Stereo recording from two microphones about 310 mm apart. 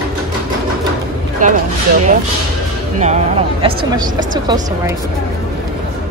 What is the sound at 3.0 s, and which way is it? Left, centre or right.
Speech, centre.